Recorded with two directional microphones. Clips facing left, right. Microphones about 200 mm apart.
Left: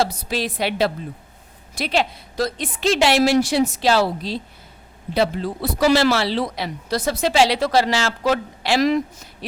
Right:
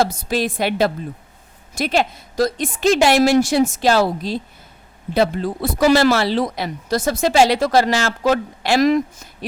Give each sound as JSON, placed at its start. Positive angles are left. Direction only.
{"t": 0.0, "sound": "speech", "side_deg": -50}